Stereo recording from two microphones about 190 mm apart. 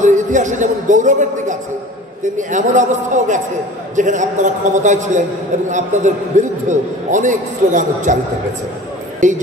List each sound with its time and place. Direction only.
0.0 s a man's voice: 40° right (ahead or behind)
9.2 s a man's voice: 40° right (ahead or behind)